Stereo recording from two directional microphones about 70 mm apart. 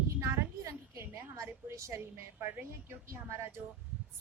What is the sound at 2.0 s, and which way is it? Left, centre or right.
A woman's voice, right.